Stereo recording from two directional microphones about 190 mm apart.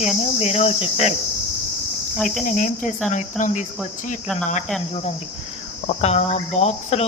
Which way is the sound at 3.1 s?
40° left (ahead or behind).